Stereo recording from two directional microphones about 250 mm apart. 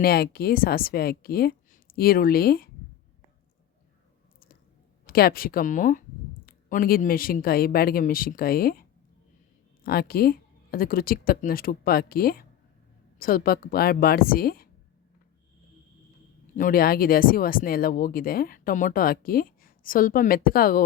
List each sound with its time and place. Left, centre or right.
0.0 s speech: left
5.0 s speech: left
16.6 s speech: left